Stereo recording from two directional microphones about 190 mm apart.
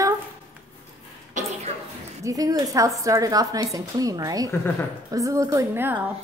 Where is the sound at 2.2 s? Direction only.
20° right (ahead or behind).